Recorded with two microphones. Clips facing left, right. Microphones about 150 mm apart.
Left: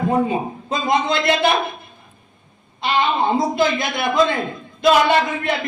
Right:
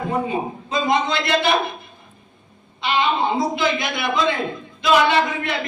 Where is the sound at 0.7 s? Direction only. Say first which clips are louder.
Left 1 dB; 50° left (ahead or behind).